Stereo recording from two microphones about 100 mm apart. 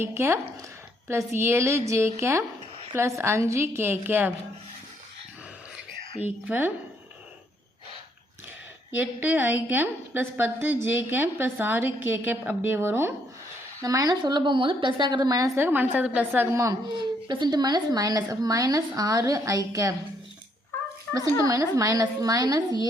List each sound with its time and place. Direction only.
0.0 s a woman's voice: 25° right (ahead or behind)
6.5 s a woman's voice: 20° right (ahead or behind)
9.0 s a woman's voice: 20° right (ahead or behind)
13.8 s a woman's voice: 35° right (ahead or behind)
15.6 s a woman's voice: 20° right (ahead or behind)
16.9 s speech: 50° right (ahead or behind); by 19.9 s 35° right (ahead or behind)
21.4 s speech: 35° right (ahead or behind)